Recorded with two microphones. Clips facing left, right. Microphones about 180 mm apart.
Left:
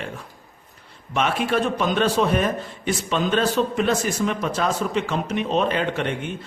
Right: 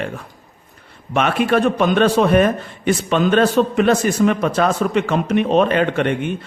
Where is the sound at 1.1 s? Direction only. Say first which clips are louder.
Right 5 dB; 60° right (ahead or behind).